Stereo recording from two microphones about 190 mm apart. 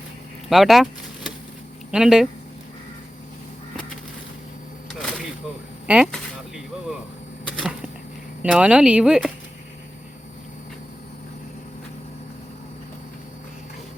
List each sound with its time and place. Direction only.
0.5 s a sound: centre (ahead or behind)
1.9 s speech: 5° right (ahead or behind)
4.9 s a sound: centre (ahead or behind)
5.9 s speech: 5° right (ahead or behind)
7.4 s arrow: 5° right (ahead or behind)
8.4 s speech: 5° right (ahead or behind)